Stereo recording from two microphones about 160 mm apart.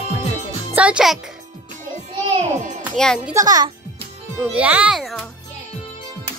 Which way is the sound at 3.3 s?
25° right (ahead or behind).